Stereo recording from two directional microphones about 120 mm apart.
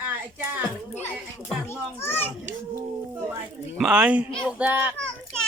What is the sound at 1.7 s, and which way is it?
Speech, 20° left (ahead or behind).